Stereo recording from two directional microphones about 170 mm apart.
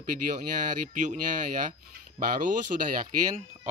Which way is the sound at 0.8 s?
50° right (ahead or behind).